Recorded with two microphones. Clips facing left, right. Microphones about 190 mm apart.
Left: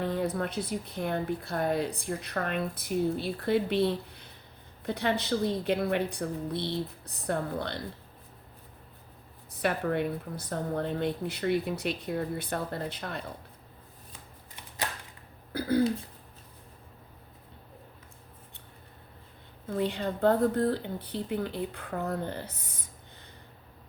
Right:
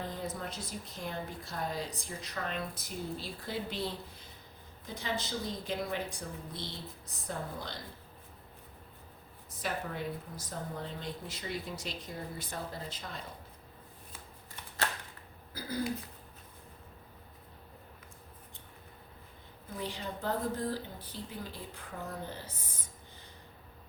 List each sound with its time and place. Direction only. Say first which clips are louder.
0.0 s speech: left 9 dB; 65° left (ahead or behind)
9.5 s speech: left 9 dB; 65° left (ahead or behind)
15.5 s throat clearing: left 11 dB; 60° left (ahead or behind)
19.7 s speech: left 9 dB; 60° left (ahead or behind)